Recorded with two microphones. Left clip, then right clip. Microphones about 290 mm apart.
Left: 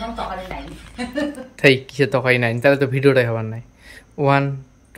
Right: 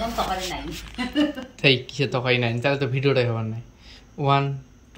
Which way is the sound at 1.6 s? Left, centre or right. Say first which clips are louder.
Left 5 dB; centre.